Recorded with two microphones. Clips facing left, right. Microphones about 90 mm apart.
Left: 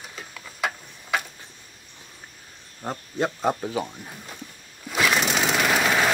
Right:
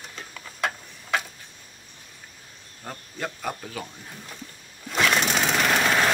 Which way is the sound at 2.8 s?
25° left (ahead or behind).